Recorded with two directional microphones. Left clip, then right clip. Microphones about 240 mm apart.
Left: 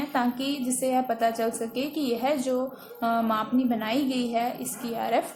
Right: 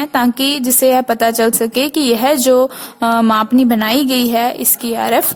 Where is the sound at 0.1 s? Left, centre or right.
Right.